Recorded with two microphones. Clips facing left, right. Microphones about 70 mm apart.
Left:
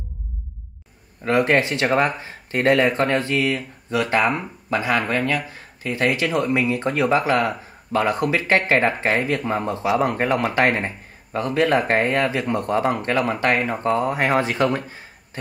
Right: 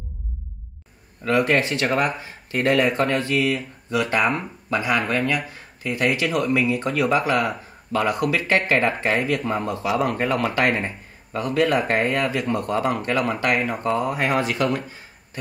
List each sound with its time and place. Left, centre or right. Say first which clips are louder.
1.2 s speech: left 1 dB; left
5.2 s speech: left 1 dB; centre
5.9 s speech: left 1 dB; left